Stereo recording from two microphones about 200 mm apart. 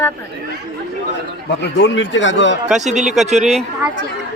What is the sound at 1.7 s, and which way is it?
Speech, 60° left (ahead or behind).